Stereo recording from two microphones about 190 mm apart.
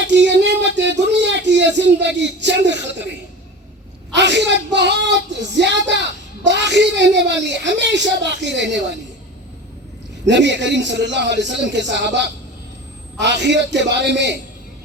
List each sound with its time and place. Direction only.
0.1 s a sound: 65° right (ahead or behind)
4.1 s speech: 65° right (ahead or behind)
10.2 s speech: 65° right (ahead or behind)